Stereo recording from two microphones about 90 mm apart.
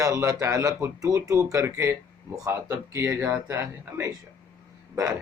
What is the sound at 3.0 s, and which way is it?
Speech, 20° right (ahead or behind).